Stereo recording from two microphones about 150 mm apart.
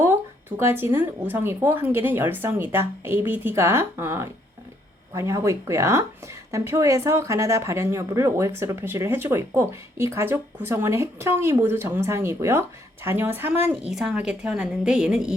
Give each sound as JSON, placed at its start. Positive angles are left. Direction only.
{"t": 0.5, "sound": "speech", "side_deg": -15}